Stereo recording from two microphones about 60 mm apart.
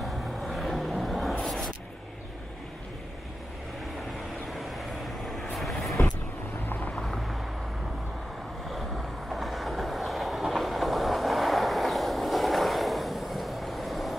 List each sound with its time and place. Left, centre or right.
0.0 s vehicle: centre
1.4 s a sound: centre
4.5 s vehicle: centre
7.0 s vehicle: centre
8.7 s train: centre